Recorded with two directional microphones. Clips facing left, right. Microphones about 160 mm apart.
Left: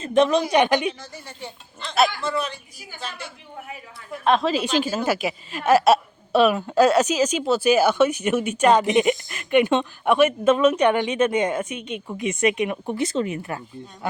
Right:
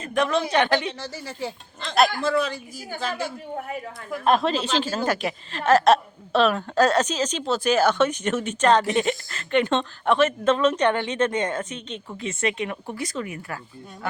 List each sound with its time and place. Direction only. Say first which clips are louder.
0.0 s a woman's voice: left 5 dB; 25° left (ahead or behind)
1.0 s speech: right 6 dB; 90° right
3.2 s a woman's voice: right 7 dB; 50° right (ahead or behind)
4.2 s a woman's voice: left 1 dB; 5° right (ahead or behind)
4.5 s a woman's voice: left 2 dB; 10° left (ahead or behind)